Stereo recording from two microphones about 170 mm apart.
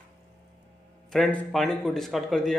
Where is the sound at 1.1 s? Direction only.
Centre (ahead or behind).